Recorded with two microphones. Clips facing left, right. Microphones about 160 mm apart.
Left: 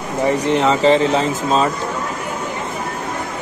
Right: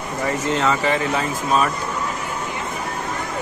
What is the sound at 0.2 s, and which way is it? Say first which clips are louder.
Speech: left 5 dB; 20° left (ahead or behind).